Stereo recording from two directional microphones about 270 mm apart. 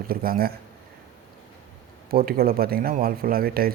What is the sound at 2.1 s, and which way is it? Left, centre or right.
A man's voice, right.